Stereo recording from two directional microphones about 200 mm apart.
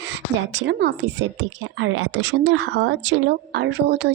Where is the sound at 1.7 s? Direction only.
75° right (ahead or behind).